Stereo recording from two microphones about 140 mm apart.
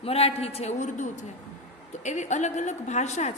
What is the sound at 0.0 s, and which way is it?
A woman's voice, 45° left (ahead or behind).